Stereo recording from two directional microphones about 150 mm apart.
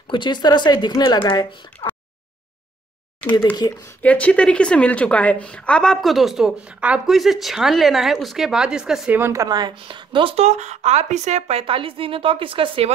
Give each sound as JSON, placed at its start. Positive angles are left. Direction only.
{"t": 0.1, "sound": "speech", "side_deg": 30}
{"t": 3.6, "sound": "speech", "side_deg": 30}
{"t": 4.0, "sound": "a woman's voice", "side_deg": 10}
{"t": 9.2, "sound": "speech", "side_deg": -20}